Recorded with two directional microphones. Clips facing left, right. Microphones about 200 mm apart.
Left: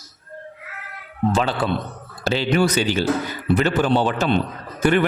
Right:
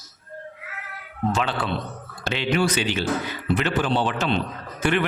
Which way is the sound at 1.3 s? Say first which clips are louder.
Left 5 dB; 35° left (ahead or behind).